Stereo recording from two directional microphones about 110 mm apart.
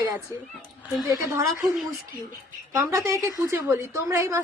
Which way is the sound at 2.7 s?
25° right (ahead or behind).